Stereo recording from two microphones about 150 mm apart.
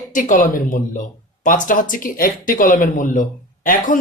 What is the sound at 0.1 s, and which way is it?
Speech, 60° left (ahead or behind).